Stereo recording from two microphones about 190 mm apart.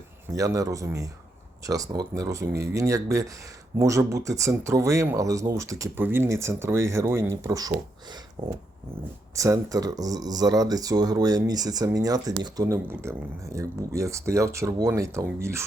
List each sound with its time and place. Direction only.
0.3 s speech: 20° right (ahead or behind)
8.4 s speech: 30° right (ahead or behind)
9.3 s speech: 15° right (ahead or behind)